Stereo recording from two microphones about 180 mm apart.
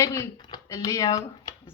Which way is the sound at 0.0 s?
20° left (ahead or behind).